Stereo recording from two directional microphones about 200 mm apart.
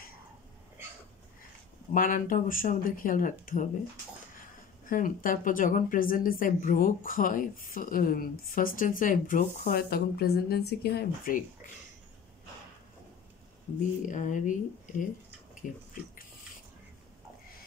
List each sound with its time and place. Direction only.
1.9 s speech: 40° left (ahead or behind)
4.8 s speech: 40° left (ahead or behind)
13.7 s speech: 40° left (ahead or behind)